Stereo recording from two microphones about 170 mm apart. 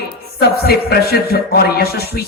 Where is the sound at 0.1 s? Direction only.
65° left (ahead or behind).